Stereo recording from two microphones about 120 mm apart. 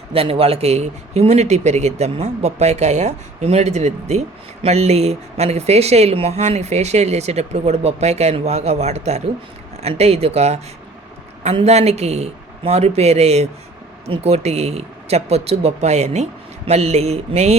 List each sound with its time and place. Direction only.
0.1 s speech: 55° right (ahead or behind)
11.6 s speech: 65° right (ahead or behind)